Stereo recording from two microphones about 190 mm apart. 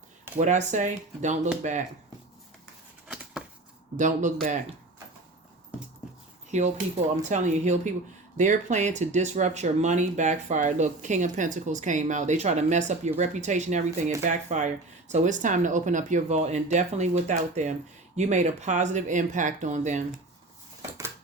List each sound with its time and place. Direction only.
0.3 s speech: 40° right (ahead or behind)
3.1 s a sound: 5° right (ahead or behind)
3.9 s speech: 40° right (ahead or behind)
6.5 s speech: 35° right (ahead or behind)